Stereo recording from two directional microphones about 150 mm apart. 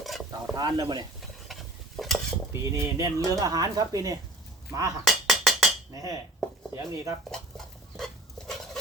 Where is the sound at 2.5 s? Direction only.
20° right (ahead or behind).